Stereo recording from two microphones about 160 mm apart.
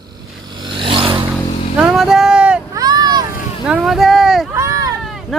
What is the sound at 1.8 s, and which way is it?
Vehicle, 5° right (ahead or behind).